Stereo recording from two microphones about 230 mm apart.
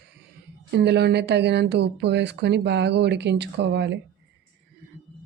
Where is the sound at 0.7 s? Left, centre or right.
Right.